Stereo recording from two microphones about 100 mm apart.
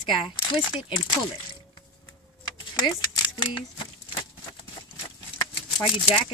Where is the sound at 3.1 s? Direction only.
50° left (ahead or behind).